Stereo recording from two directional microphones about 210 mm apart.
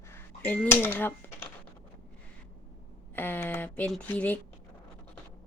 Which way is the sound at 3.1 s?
10° left (ahead or behind).